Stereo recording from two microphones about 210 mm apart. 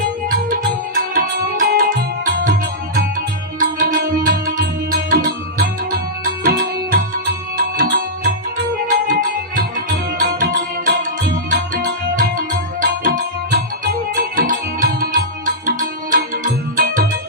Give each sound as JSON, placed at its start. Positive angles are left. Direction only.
{"t": 0.3, "sound": "music", "side_deg": -40}
{"t": 3.6, "sound": "music", "side_deg": -40}
{"t": 9.6, "sound": "music", "side_deg": -40}